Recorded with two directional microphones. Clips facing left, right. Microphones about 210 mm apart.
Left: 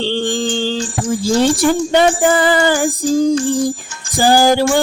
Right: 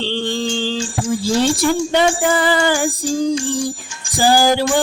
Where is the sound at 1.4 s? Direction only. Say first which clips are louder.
Left 3 dB; 45° left (ahead or behind).